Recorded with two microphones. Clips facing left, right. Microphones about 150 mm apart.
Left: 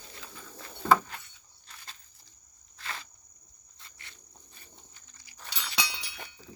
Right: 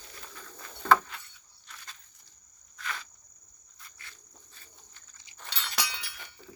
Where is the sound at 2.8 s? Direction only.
30° left (ahead or behind).